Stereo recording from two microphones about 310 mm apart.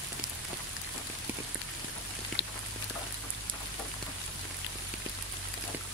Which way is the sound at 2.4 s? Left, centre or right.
Left.